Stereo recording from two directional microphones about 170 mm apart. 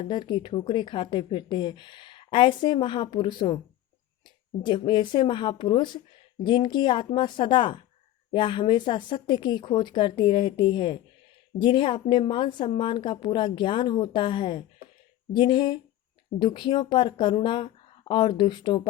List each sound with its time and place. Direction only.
0.0 s speech: 25° left (ahead or behind)
4.6 s speech: 25° left (ahead or behind)